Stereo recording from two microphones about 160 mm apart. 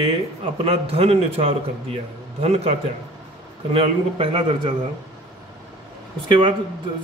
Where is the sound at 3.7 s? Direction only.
35° right (ahead or behind).